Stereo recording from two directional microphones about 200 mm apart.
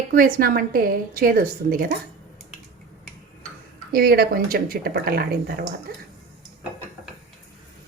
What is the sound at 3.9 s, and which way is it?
A woman's voice, 50° right (ahead or behind).